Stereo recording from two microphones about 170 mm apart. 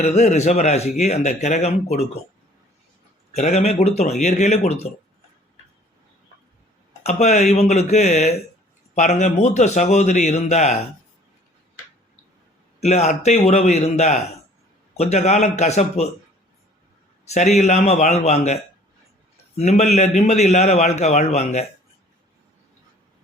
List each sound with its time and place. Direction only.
0.0 s speech: 40° left (ahead or behind)
3.3 s speech: 40° left (ahead or behind)
7.0 s speech: 40° left (ahead or behind)
12.8 s speech: 40° left (ahead or behind)
17.2 s speech: 40° left (ahead or behind)